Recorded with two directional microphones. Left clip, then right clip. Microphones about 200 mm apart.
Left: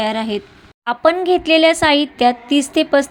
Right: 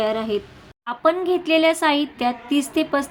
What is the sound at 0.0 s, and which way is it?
A woman's voice, 20° left (ahead or behind).